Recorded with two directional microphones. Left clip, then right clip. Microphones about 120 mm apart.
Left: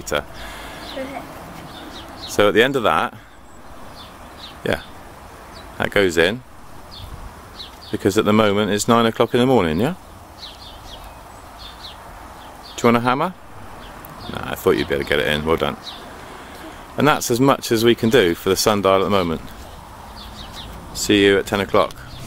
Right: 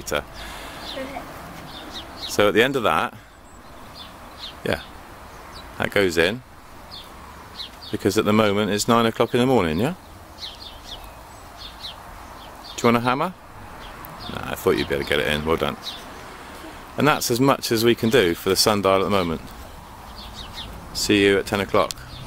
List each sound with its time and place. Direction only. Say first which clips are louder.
0.0 s speech: left 3 dB; centre (ahead or behind)
2.3 s speech: left 3 dB; centre (ahead or behind)
4.6 s speech: left 3 dB; centre (ahead or behind)
7.5 s speech: left 2 dB; centre (ahead or behind)
12.7 s speech: left 3 dB; centre (ahead or behind)
16.9 s speech: left 3 dB; centre (ahead or behind)
20.9 s speech: left 3 dB; centre (ahead or behind)